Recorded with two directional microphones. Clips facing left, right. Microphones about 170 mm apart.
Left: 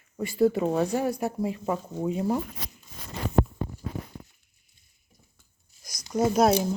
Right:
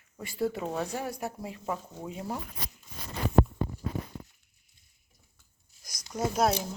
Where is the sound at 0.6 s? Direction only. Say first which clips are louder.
Left 8 dB; 25° left (ahead or behind).